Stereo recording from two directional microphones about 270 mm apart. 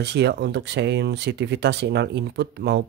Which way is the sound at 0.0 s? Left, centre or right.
Right.